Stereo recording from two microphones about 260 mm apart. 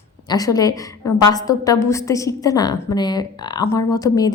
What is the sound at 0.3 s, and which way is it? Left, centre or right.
A woman's voice, centre.